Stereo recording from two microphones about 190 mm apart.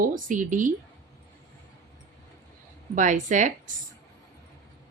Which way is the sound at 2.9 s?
40° right (ahead or behind).